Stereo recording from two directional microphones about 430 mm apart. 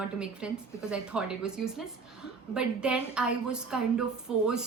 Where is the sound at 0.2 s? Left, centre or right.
Centre.